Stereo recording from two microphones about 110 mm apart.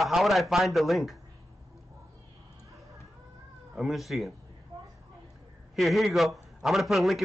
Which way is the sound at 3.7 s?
Centre (ahead or behind).